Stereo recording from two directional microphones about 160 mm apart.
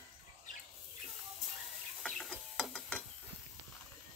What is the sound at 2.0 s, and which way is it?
Ratchet, 5° left (ahead or behind).